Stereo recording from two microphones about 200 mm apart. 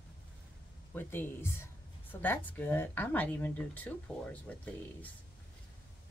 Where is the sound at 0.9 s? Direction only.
10° left (ahead or behind).